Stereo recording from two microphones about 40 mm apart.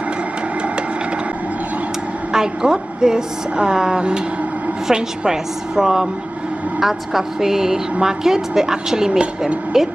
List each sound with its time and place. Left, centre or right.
2.3 s a woman's voice: centre